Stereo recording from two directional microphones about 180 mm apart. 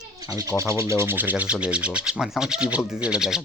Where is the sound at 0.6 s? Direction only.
15° right (ahead or behind).